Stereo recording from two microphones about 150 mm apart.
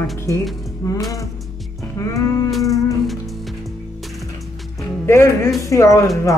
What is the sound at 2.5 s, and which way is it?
Music, centre (ahead or behind).